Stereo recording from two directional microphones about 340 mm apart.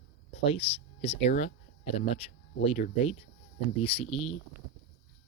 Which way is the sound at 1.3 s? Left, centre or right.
Centre.